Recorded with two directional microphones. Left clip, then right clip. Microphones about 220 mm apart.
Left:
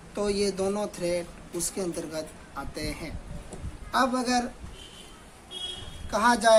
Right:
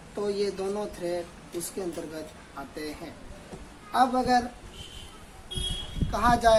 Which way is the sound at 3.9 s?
25° left (ahead or behind).